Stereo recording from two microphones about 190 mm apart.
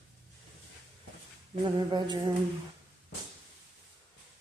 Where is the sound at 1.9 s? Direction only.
20° right (ahead or behind).